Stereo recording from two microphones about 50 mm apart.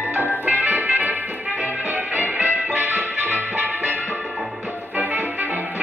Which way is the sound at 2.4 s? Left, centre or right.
Right.